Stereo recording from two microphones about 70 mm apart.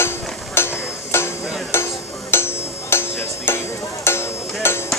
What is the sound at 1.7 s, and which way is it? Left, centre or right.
Music, left.